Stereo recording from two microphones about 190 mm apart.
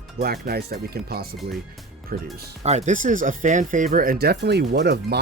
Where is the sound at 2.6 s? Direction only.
35° right (ahead or behind).